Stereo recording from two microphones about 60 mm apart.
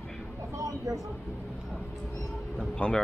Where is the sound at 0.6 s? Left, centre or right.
Right.